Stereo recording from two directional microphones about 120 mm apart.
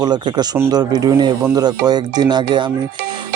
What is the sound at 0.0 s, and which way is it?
Speech, 35° right (ahead or behind).